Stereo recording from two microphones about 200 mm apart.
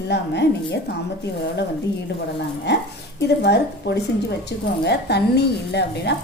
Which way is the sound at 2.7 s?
60° left (ahead or behind).